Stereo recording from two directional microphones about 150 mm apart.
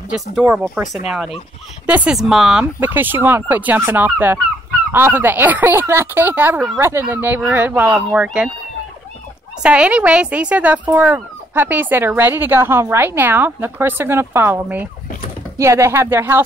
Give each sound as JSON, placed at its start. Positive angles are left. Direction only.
{"t": 0.5, "sound": "speech", "side_deg": -10}
{"t": 9.6, "sound": "speech", "side_deg": -10}